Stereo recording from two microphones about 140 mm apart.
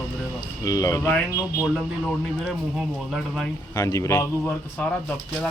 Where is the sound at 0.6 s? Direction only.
25° left (ahead or behind).